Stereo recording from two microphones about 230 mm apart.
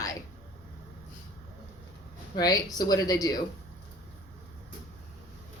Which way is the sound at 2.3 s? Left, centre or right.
Centre.